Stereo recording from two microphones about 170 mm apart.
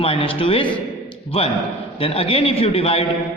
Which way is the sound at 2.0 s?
35° left (ahead or behind).